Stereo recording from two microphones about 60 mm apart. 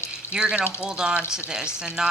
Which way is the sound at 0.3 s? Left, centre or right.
Right.